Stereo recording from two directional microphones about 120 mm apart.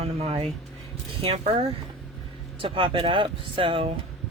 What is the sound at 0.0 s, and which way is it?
Speech, 60° right (ahead or behind).